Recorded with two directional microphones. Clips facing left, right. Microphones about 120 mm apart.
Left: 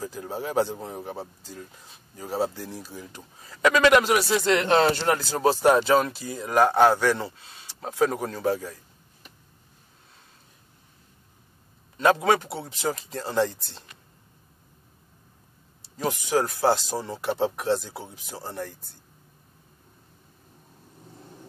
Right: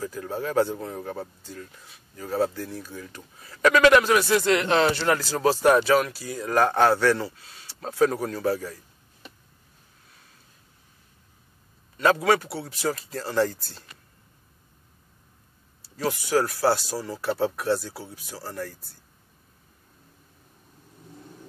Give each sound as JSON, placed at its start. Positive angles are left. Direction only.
{"t": 0.0, "sound": "speech", "side_deg": 20}
{"t": 5.0, "sound": "speech", "side_deg": 25}
{"t": 12.0, "sound": "speech", "side_deg": 20}
{"t": 15.8, "sound": "speech", "side_deg": 20}